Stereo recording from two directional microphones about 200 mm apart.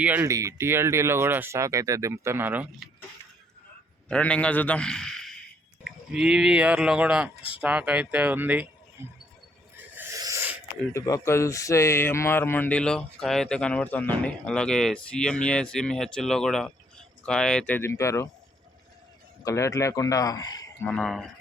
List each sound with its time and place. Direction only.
0.0 s speech: 10° right (ahead or behind)
4.1 s speech: 5° left (ahead or behind); by 9.1 s 10° right (ahead or behind)
9.7 s a sound: 10° right (ahead or behind)
10.9 s speech: 15° left (ahead or behind)
19.5 s speech: 15° left (ahead or behind)
20.9 s speech: 5° left (ahead or behind)